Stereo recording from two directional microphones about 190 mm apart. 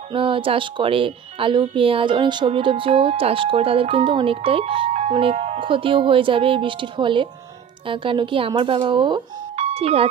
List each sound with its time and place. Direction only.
0.1 s a woman's voice: 25° right (ahead or behind)